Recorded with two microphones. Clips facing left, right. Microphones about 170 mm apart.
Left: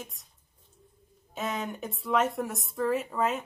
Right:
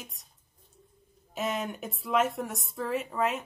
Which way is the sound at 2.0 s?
Centre (ahead or behind).